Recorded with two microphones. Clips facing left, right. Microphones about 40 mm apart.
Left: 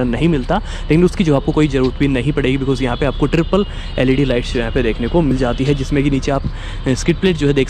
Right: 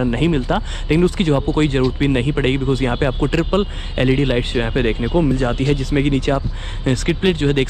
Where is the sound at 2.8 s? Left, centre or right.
Left.